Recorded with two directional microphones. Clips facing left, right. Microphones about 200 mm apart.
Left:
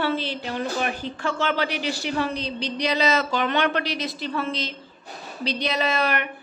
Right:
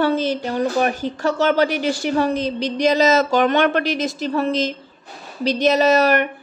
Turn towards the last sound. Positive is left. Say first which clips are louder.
# right 9 dB
turn(degrees=-40)  # may be behind; listen again after turning